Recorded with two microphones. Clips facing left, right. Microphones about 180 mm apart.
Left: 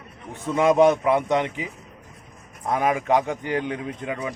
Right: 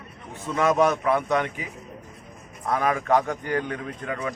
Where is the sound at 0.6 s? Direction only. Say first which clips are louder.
Left 4 dB; 20° left (ahead or behind).